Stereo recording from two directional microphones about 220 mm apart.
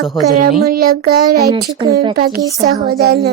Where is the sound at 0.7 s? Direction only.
45° right (ahead or behind).